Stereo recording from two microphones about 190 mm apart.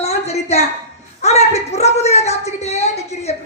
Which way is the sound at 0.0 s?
35° left (ahead or behind).